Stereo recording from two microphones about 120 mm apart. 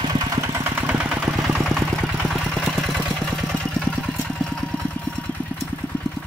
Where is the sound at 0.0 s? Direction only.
35° right (ahead or behind).